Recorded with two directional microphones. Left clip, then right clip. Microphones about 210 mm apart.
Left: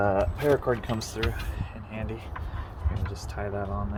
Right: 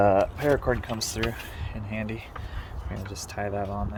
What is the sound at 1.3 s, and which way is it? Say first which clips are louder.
Speech: right 1 dB; 45° right (ahead or behind).